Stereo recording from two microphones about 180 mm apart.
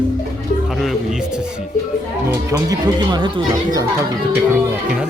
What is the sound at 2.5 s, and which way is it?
Speech, 20° right (ahead or behind).